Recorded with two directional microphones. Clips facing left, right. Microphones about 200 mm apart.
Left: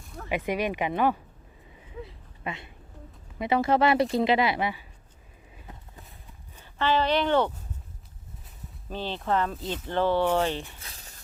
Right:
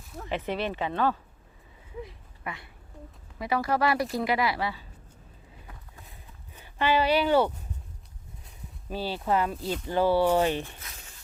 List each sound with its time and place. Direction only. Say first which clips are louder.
0.3 s speech: left 3 dB; 10° left (ahead or behind)
2.4 s speech: left 3 dB; 25° left (ahead or behind)
6.6 s speech: even; 10° right (ahead or behind)
8.9 s speech: right 1 dB; 10° right (ahead or behind)
10.8 s a sound: even; 35° left (ahead or behind)